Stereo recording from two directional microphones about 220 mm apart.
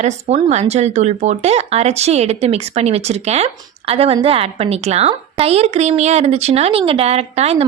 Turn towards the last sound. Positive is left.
turn(degrees=-30)  # may be behind; listen again after turning